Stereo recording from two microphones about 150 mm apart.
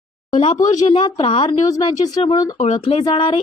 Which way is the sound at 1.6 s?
25° left (ahead or behind).